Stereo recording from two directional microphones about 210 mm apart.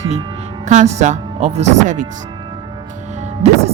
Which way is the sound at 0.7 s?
35° right (ahead or behind).